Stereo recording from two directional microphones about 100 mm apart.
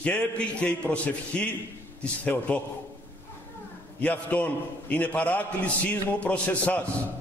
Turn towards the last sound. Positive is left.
turn(degrees=15)  # may be behind; listen again after turning